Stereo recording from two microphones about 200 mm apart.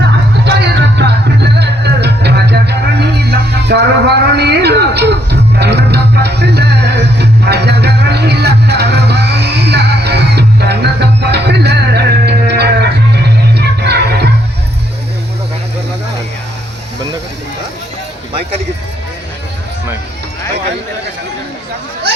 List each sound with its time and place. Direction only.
0.4 s music: 55° right (ahead or behind)